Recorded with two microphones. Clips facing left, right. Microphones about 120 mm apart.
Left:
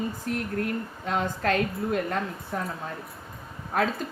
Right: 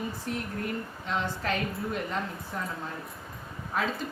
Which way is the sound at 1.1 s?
50° left (ahead or behind).